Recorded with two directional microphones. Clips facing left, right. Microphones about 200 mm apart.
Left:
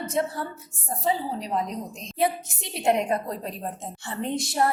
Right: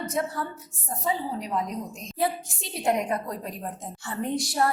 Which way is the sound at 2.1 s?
20° left (ahead or behind).